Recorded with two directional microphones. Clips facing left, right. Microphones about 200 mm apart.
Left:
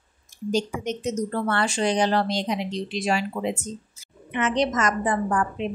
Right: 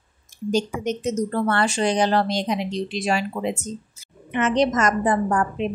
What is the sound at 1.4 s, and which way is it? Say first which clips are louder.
A woman's voice: right 2 dB; 40° right (ahead or behind).